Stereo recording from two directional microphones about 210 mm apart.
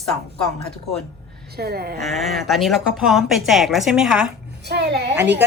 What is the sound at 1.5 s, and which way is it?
Speech, 50° right (ahead or behind).